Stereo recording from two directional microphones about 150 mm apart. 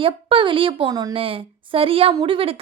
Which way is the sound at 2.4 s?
40° right (ahead or behind).